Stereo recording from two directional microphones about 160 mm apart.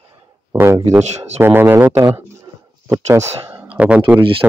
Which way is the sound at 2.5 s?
25° right (ahead or behind).